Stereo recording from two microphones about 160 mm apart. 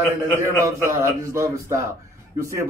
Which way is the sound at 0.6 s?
20° right (ahead or behind).